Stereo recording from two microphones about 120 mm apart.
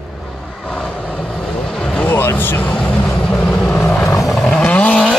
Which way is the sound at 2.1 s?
15° left (ahead or behind).